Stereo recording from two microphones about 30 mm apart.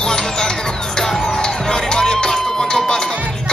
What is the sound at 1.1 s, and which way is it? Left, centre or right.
Music, centre.